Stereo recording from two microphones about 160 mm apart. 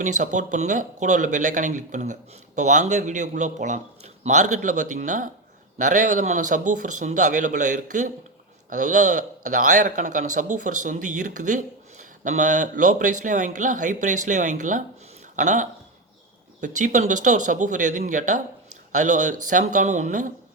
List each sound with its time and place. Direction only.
0.0 s a man's voice: 50° right (ahead or behind)